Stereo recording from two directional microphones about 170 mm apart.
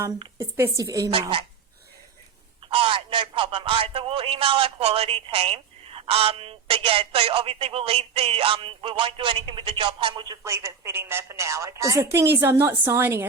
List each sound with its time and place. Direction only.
0.0 s a woman's voice: 15° right (ahead or behind)
2.6 s speech: 30° right (ahead or behind); by 13.2 s 15° right (ahead or behind)